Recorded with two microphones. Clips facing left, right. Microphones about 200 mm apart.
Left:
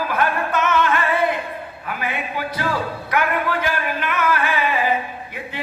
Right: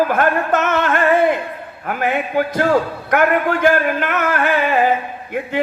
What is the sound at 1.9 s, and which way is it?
A man's voice, 50° right (ahead or behind).